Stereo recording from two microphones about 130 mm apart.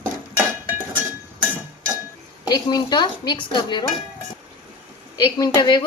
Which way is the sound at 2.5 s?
35° left (ahead or behind).